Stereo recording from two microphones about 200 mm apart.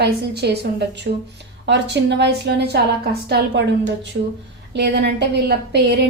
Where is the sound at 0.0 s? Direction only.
55° right (ahead or behind).